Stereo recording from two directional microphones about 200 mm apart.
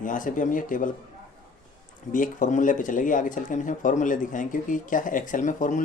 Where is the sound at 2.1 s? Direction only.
40° left (ahead or behind).